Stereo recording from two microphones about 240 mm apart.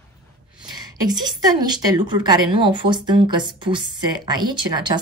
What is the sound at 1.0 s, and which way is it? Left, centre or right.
A woman's voice, centre.